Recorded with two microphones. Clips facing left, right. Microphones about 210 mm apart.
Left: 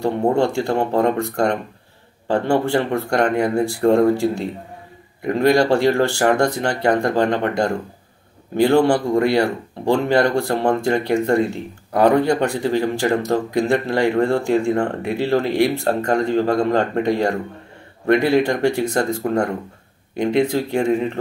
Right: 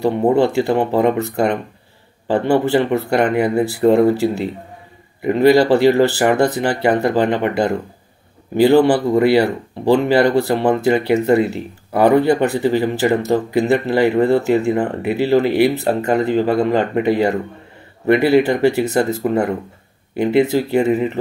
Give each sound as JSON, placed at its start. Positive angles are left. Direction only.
{"t": 0.0, "sound": "speech", "side_deg": -5}